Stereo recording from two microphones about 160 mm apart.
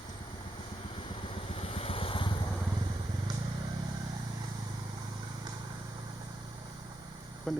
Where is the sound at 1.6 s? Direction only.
35° left (ahead or behind).